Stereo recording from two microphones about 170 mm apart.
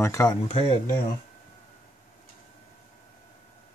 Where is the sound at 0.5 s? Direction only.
40° left (ahead or behind).